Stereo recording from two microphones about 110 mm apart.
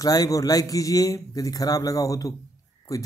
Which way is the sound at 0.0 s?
35° left (ahead or behind).